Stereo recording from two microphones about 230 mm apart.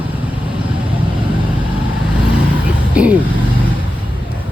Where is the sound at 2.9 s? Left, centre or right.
Centre.